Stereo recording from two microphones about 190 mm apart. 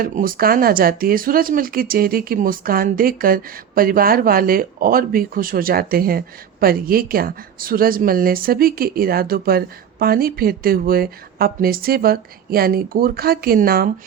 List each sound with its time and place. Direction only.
0.0 s speech: 45° right (ahead or behind)